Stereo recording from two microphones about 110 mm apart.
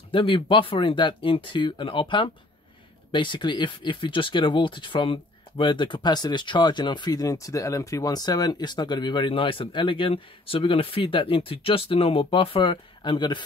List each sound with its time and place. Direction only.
0.1 s speech: 50° left (ahead or behind)